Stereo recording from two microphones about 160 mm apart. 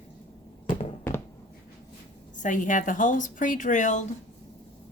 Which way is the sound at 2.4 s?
55° left (ahead or behind).